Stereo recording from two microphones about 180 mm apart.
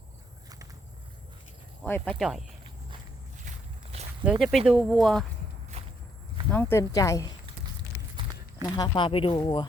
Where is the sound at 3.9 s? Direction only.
35° right (ahead or behind).